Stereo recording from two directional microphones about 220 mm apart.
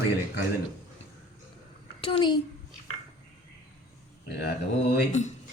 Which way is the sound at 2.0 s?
20° left (ahead or behind).